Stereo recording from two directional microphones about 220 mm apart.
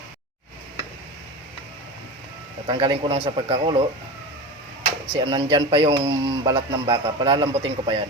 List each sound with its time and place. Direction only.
2.6 s speech: 20° right (ahead or behind)
5.1 s speech: 20° right (ahead or behind)